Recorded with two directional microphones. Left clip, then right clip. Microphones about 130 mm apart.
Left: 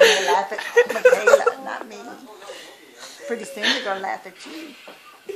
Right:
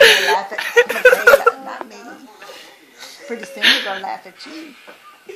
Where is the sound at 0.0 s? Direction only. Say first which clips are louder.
Right 4 dB; 20° right (ahead or behind).